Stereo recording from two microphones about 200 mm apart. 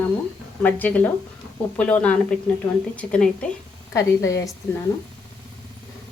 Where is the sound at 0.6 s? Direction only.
10° left (ahead or behind).